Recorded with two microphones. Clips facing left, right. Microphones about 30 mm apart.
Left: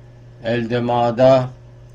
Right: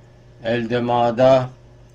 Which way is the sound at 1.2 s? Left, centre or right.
Centre.